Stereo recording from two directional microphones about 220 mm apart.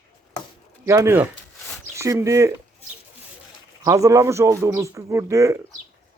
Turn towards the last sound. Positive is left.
turn(degrees=-15)  # may be behind; listen again after turning